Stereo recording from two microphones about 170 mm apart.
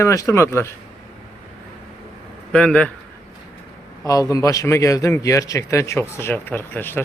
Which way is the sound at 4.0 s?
20° left (ahead or behind).